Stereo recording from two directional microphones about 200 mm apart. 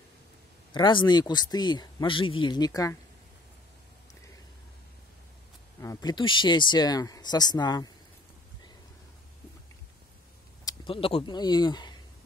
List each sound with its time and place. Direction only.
0.7 s speech: 20° left (ahead or behind)
5.8 s speech: 15° left (ahead or behind)
10.6 s speech: 20° left (ahead or behind)